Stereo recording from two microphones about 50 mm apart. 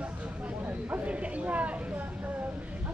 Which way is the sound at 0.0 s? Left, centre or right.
Right.